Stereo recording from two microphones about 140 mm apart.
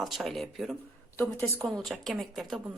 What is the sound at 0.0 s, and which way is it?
A woman's voice, centre (ahead or behind).